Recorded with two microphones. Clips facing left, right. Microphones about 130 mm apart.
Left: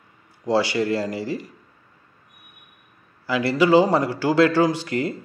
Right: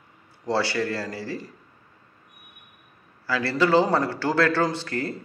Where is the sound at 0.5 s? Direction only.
15° left (ahead or behind).